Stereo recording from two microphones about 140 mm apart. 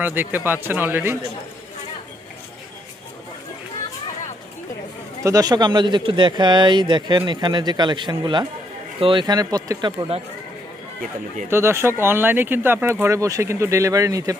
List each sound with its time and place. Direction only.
0.0 s a man's voice: 15° right (ahead or behind)
5.2 s speech: 25° right (ahead or behind)
11.5 s a man's voice: 20° right (ahead or behind)